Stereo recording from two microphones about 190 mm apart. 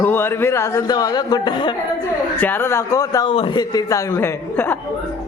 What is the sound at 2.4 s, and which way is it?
A man's voice, 10° left (ahead or behind).